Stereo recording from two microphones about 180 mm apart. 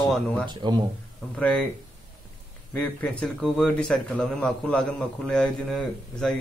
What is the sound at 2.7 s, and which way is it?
Speech, 10° left (ahead or behind).